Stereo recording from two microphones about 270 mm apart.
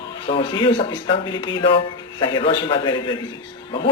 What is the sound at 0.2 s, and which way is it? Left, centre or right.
Speech, centre.